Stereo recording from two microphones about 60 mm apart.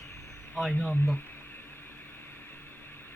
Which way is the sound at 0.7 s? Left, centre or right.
Centre.